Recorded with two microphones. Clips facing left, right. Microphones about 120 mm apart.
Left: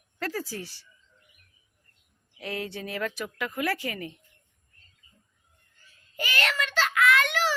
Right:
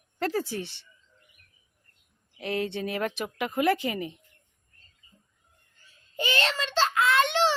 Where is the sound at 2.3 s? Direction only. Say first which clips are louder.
Right 5 dB; 25° right (ahead or behind).